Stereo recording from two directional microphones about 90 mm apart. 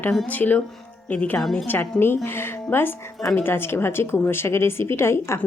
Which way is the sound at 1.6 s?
20° left (ahead or behind).